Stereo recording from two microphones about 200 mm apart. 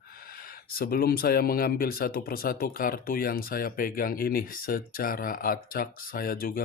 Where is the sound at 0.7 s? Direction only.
45° left (ahead or behind).